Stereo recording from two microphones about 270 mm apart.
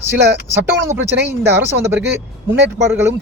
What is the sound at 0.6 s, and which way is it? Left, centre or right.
A man's voice, centre.